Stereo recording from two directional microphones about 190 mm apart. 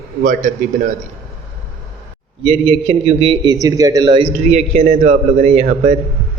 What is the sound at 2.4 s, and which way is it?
A man's voice, 30° right (ahead or behind).